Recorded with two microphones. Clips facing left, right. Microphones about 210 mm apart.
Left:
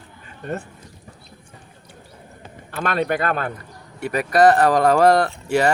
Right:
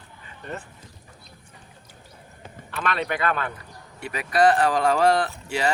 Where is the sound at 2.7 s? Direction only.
45° left (ahead or behind).